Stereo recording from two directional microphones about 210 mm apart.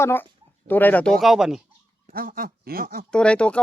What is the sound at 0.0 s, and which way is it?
Speech, 10° left (ahead or behind).